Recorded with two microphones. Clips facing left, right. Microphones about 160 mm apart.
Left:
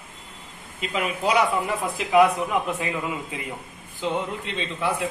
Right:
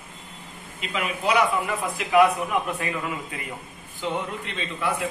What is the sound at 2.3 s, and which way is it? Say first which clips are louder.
A woman's voice: left 1 dB; 20° left (ahead or behind).